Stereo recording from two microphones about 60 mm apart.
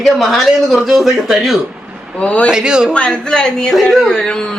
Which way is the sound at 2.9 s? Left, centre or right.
Centre.